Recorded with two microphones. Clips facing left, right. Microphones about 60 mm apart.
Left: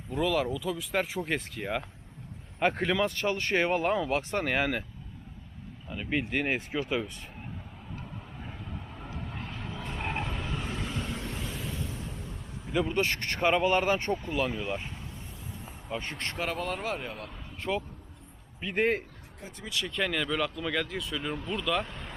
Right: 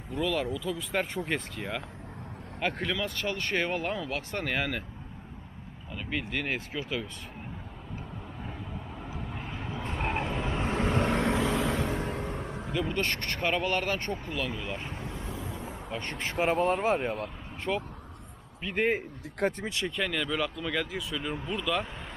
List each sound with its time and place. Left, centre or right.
0.1 s speech: centre
5.9 s speech: centre
9.0 s vehicle: centre
10.5 s vehicle: right
11.1 s vehicle: right
12.8 s speech: centre
15.0 s vehicle: right
15.9 s speech: centre
16.4 s speech: right
17.6 s speech: centre
19.6 s speech: right
20.0 s speech: centre